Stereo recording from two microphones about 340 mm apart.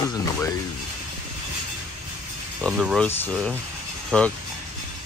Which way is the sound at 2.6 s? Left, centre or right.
Centre.